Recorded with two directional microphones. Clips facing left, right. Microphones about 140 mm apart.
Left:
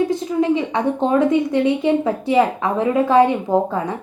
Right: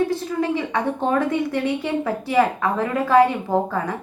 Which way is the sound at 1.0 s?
20° left (ahead or behind).